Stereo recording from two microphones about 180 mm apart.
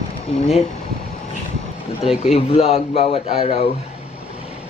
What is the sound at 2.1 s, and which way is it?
Speech, 35° left (ahead or behind).